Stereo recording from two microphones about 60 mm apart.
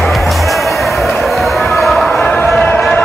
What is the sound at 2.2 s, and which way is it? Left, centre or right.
Basketball bounce, left.